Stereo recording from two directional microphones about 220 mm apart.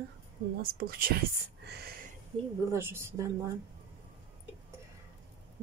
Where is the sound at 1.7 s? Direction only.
45° right (ahead or behind).